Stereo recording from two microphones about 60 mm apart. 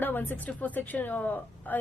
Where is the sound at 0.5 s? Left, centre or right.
Left.